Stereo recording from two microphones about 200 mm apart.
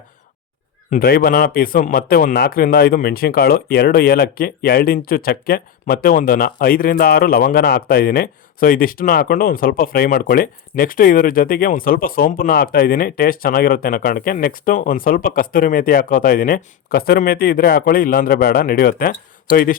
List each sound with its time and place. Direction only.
0.9 s a man's voice: 50° left (ahead or behind)